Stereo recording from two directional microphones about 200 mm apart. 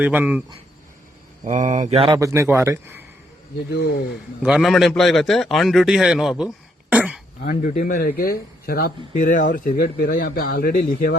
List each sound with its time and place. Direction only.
0.0 s speech: 5° right (ahead or behind)
1.5 s mantra: 35° right (ahead or behind)
2.1 s speech: 15° right (ahead or behind)
3.7 s speech: 55° left (ahead or behind)
4.4 s a man's voice: centre (ahead or behind)
6.9 s throat clearing: 5° right (ahead or behind)
7.7 s speech: 40° left (ahead or behind)